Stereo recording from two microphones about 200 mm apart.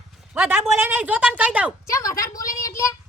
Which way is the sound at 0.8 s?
10° right (ahead or behind).